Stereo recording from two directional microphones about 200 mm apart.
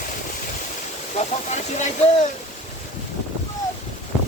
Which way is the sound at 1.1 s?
35° left (ahead or behind).